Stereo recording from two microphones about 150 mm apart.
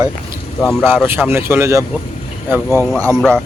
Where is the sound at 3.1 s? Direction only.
5° left (ahead or behind).